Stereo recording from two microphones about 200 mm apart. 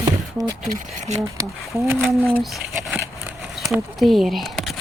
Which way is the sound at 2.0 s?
5° right (ahead or behind).